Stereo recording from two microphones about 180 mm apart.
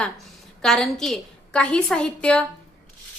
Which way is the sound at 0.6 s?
5° left (ahead or behind).